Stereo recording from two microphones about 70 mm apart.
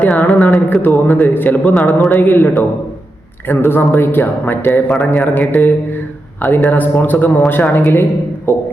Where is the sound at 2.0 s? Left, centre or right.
Left.